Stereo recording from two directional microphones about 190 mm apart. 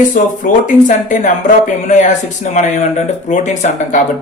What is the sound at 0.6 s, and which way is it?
Speech, 40° left (ahead or behind).